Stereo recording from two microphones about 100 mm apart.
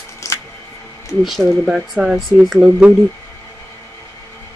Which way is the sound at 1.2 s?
5° right (ahead or behind).